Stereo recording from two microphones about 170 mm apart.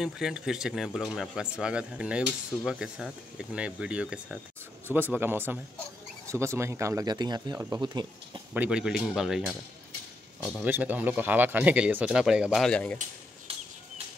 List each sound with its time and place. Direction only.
0.0 s speech: 5° right (ahead or behind); by 8.4 s 25° right (ahead or behind)
8.5 s speech: 5° right (ahead or behind)
10.6 s speech: 10° right (ahead or behind); by 13.0 s 5° left (ahead or behind)
13.5 s a sound: 35° right (ahead or behind)